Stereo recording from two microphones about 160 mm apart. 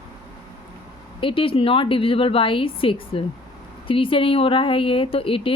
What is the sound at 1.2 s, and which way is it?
A woman's voice, 35° left (ahead or behind).